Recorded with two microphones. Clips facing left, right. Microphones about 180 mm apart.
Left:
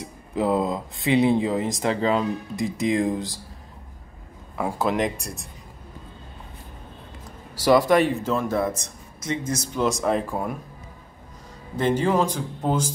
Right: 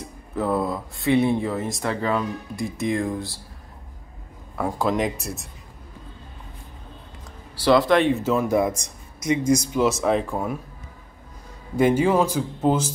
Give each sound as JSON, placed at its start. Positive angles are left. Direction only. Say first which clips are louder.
{"t": 0.0, "sound": "speech", "louder": "left 2 dB", "side_deg": 15}
{"t": 4.6, "sound": "speech", "louder": "right 1 dB", "side_deg": 0}
{"t": 7.9, "sound": "speech", "louder": "right 1 dB", "side_deg": 5}
{"t": 8.2, "sound": "a man's voice", "louder": "right 3 dB", "side_deg": -5}
{"t": 11.7, "sound": "a man's voice", "louder": "right 3 dB", "side_deg": -10}